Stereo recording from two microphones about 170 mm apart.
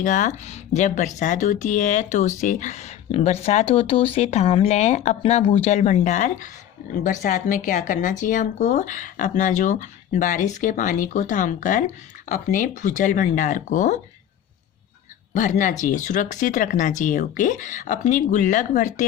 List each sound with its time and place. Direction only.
0.0 s speech: 45° left (ahead or behind)
15.3 s speech: 45° left (ahead or behind)